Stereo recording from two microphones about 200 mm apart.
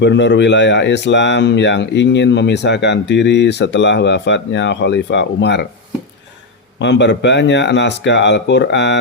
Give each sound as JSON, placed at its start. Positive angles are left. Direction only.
{"t": 0.0, "sound": "speech", "side_deg": 60}
{"t": 6.7, "sound": "speech", "side_deg": 60}